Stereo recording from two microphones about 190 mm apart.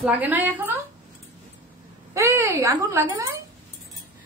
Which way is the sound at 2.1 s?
15° right (ahead or behind).